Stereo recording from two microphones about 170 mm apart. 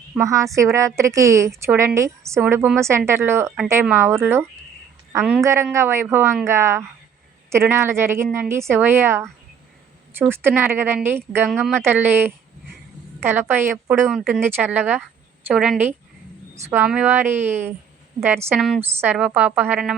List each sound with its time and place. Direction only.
0.1 s a woman's voice: 15° right (ahead or behind)
11.4 s a woman's voice: centre (ahead or behind)
11.8 s a woman's voice: 10° right (ahead or behind)